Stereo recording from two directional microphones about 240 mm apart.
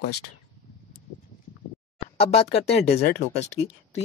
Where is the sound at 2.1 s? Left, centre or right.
Left.